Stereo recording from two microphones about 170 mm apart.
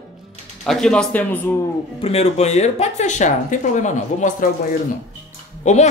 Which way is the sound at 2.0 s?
40° left (ahead or behind).